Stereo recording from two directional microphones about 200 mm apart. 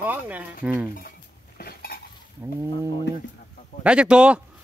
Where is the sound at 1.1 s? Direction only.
50° left (ahead or behind).